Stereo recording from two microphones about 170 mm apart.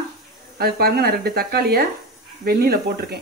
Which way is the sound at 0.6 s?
65° right (ahead or behind).